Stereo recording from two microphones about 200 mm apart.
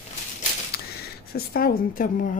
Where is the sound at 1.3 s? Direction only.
50° left (ahead or behind).